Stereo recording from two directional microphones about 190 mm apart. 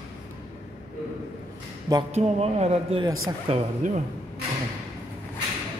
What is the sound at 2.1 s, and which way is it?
Speech, 35° right (ahead or behind).